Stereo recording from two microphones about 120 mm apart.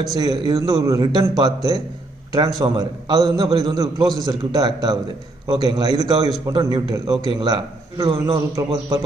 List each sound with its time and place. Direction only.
0.0 s a man's voice: 30° right (ahead or behind)